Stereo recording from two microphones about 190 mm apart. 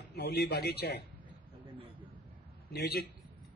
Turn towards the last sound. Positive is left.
turn(degrees=60)  # may be behind; listen again after turning